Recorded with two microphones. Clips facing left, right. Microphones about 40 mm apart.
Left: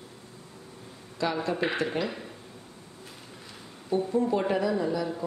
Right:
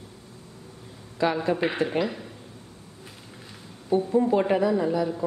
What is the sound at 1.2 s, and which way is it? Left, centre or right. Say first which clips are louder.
Speech: right 5 dB; right.